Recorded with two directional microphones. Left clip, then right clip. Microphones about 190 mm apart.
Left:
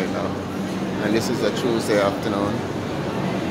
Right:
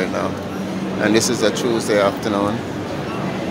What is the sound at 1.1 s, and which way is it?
Speech, 20° right (ahead or behind).